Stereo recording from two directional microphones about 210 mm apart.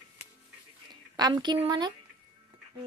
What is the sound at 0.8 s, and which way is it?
Speech, 20° right (ahead or behind).